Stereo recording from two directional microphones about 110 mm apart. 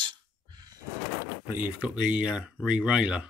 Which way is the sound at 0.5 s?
35° right (ahead or behind).